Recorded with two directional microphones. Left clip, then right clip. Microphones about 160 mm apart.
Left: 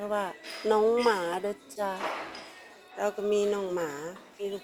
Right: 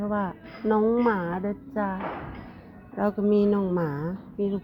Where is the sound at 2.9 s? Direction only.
10° right (ahead or behind).